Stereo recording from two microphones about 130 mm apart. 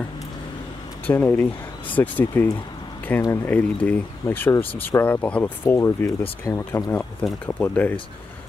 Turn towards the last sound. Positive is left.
turn(degrees=10)  # may be behind; listen again after turning